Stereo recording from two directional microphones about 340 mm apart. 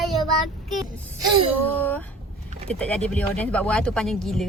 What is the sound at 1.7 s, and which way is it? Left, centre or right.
Speech, centre.